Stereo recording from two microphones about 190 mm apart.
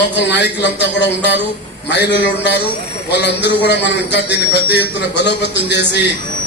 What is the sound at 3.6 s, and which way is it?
A man's voice, 65° left (ahead or behind).